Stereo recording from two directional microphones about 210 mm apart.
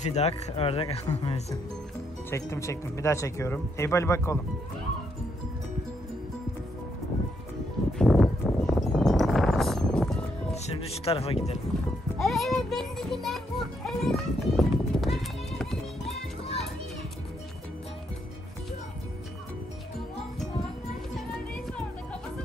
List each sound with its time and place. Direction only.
0.0 s speech: 30° left (ahead or behind)
2.3 s speech: 15° left (ahead or behind)
8.0 s a sound: centre (ahead or behind)
11.1 s speech: 30° left (ahead or behind)
12.2 s music: centre (ahead or behind)